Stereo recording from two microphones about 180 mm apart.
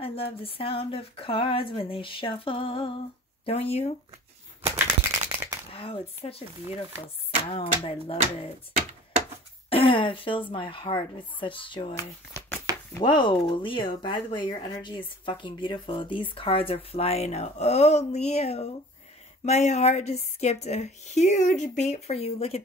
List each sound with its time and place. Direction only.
0.4 s a woman's voice: 30° left (ahead or behind)
5.3 s a sound: 15° right (ahead or behind)
5.7 s a woman's voice: 30° left (ahead or behind)
9.7 s speech: 30° left (ahead or behind)
12.7 s chopping: 20° right (ahead or behind)
13.0 s a woman's voice: 25° left (ahead or behind)